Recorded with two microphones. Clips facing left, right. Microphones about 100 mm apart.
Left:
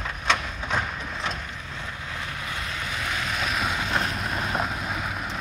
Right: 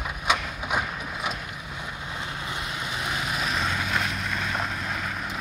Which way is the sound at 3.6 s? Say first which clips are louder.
Left 1 dB; 20° left (ahead or behind).